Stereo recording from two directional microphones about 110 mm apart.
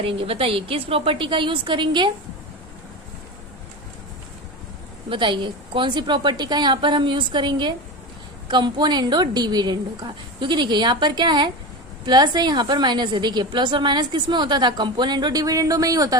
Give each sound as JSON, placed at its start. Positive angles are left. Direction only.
{"t": 0.0, "sound": "a woman's voice", "side_deg": -55}
{"t": 5.0, "sound": "a woman's voice", "side_deg": -50}